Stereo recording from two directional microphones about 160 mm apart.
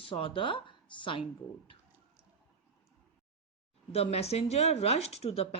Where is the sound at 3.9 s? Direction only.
40° left (ahead or behind).